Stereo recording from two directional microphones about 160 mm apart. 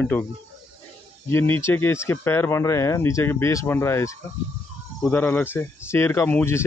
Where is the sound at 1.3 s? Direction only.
15° left (ahead or behind).